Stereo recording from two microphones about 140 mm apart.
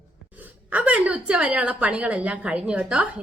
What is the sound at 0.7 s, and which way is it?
A woman's voice, 10° right (ahead or behind).